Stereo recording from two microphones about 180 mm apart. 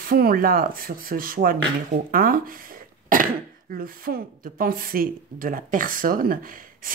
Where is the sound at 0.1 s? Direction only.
50° right (ahead or behind).